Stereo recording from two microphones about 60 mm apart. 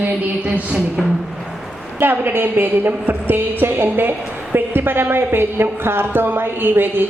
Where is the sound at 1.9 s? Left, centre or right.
Right.